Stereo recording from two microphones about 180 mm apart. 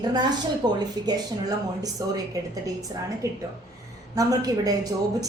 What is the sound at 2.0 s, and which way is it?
Speech, 20° right (ahead or behind).